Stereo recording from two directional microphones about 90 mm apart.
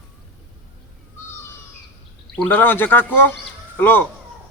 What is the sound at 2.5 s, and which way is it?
Speech, 20° left (ahead or behind).